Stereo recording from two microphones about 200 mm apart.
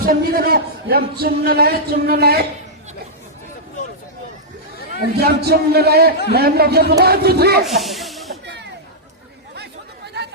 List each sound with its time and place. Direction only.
0.0 s a man's voice: 45° right (ahead or behind)
4.9 s a man's voice: 50° right (ahead or behind)
7.6 s snake: centre (ahead or behind)
10.2 s chatter: 55° right (ahead or behind)